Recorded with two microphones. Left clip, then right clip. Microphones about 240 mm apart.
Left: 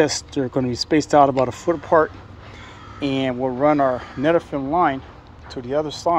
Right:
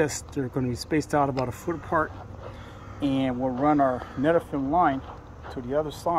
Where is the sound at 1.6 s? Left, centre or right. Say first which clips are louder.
Left 9 dB; left.